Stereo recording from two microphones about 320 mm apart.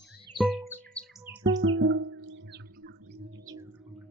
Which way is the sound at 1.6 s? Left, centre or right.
Right.